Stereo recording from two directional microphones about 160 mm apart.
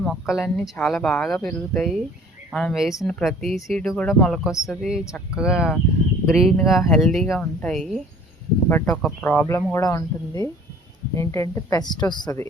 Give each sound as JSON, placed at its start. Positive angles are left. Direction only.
{"t": 0.0, "sound": "speech", "side_deg": 0}
{"t": 8.7, "sound": "a woman's voice", "side_deg": 15}